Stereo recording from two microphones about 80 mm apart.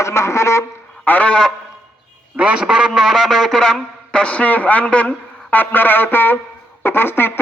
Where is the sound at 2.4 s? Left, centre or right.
Centre.